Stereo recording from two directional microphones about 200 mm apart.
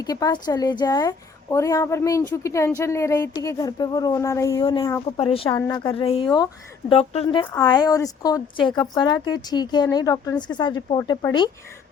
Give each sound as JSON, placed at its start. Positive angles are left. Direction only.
{"t": 0.0, "sound": "speech", "side_deg": 20}
{"t": 4.5, "sound": "speech", "side_deg": 25}